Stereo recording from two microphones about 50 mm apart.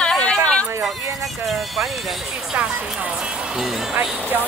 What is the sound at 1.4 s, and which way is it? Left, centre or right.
Speech, centre.